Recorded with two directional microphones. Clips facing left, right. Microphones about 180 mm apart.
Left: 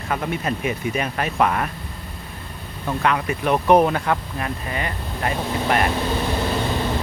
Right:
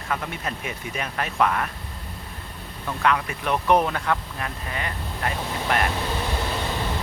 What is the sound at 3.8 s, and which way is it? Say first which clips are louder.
Speech: left 4 dB; 10° left (ahead or behind).